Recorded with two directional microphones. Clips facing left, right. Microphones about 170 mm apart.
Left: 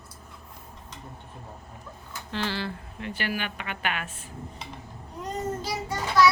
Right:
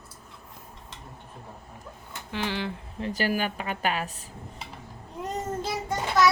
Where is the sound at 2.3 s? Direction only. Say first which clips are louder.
Even; 15° right (ahead or behind).